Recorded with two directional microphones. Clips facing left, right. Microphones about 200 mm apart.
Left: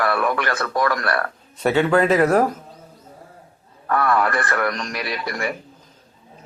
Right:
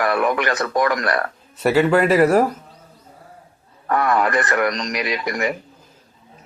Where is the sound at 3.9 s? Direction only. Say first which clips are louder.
Right 1 dB; 20° right (ahead or behind).